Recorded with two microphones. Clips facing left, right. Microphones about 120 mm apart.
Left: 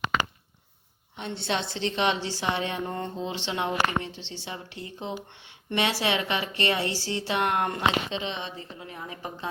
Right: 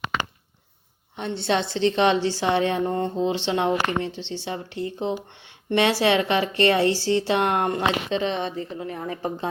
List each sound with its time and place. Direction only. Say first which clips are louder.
1.1 s speech: right 6 dB; 35° right (ahead or behind)
2.6 s a woman's voice: right 8 dB; 45° right (ahead or behind)
2.8 s speech: right 8 dB; 30° right (ahead or behind)
8.1 s a woman's voice: right 8 dB; 45° right (ahead or behind)